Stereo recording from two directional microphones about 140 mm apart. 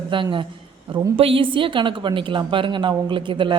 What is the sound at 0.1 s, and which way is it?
Speech, 35° right (ahead or behind).